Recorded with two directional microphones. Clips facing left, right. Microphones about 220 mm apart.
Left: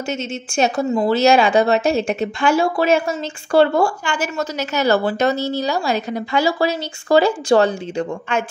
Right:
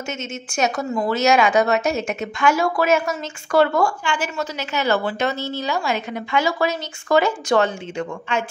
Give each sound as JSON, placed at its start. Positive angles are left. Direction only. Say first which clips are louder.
{"t": 0.1, "sound": "a woman's voice", "louder": "left 6 dB", "side_deg": 35}
{"t": 4.0, "sound": "a woman's voice", "louder": "left 2 dB", "side_deg": 45}
{"t": 8.3, "sound": "speech", "louder": "left 2 dB", "side_deg": 50}